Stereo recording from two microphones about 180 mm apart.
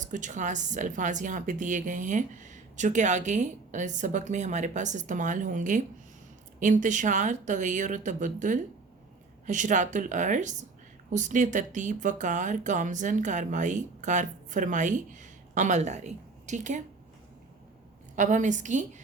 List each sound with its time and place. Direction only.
0.0 s a woman's voice: 45° right (ahead or behind)
18.2 s a woman's voice: 45° right (ahead or behind)